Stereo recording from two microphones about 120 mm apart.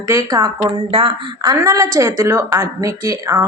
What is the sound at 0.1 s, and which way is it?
Speech, 25° right (ahead or behind).